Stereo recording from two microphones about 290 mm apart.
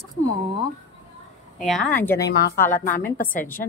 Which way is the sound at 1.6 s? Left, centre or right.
Centre.